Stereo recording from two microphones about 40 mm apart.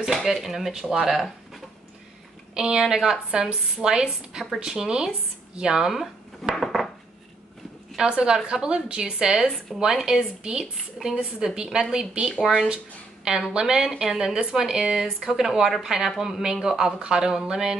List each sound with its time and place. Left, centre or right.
0.0 s speech: centre
2.5 s a woman's voice: centre
6.5 s dishes: centre
8.0 s a woman's voice: right
9.7 s a woman's voice: centre
10.0 s a woman's voice: right